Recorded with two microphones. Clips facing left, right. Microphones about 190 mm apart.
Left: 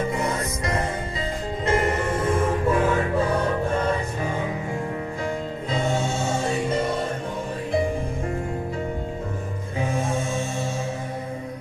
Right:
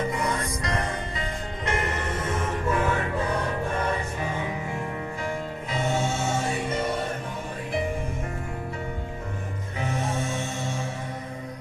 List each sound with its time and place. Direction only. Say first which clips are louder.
0.1 s music: left 2 dB; 25° left (ahead or behind)
9.9 s music: left 2 dB; 25° left (ahead or behind)